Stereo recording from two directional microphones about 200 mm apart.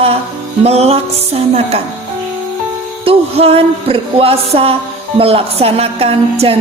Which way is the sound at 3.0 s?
30° right (ahead or behind).